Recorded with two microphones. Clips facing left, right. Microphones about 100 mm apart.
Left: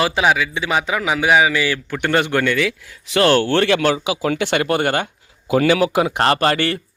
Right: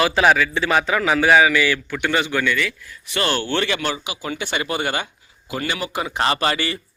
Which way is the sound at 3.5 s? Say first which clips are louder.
Left 6 dB; 65° left (ahead or behind).